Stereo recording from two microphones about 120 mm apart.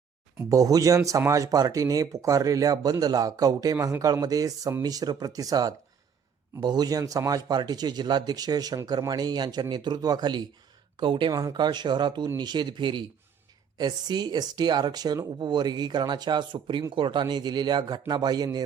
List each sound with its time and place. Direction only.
0.4 s speech: 30° right (ahead or behind)
11.3 s speech: 30° right (ahead or behind)